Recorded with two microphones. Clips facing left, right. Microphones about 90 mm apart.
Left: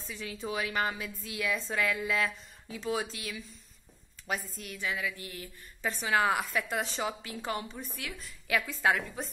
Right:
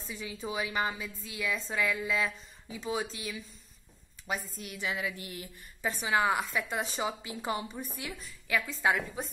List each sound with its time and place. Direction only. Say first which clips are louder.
0.0 s a woman's voice: even; 5° right (ahead or behind)
4.6 s a woman's voice: even; 20° right (ahead or behind)
5.9 s a woman's voice: even; 5° right (ahead or behind)